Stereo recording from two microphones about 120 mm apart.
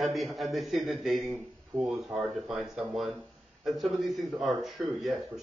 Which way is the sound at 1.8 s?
Centre (ahead or behind).